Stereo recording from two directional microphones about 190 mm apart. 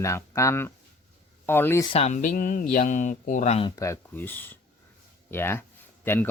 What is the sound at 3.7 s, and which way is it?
Speech, 15° left (ahead or behind).